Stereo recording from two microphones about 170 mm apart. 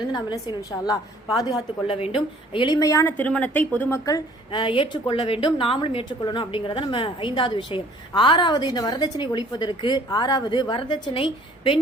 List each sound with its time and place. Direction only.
0.1 s speech: 25° left (ahead or behind)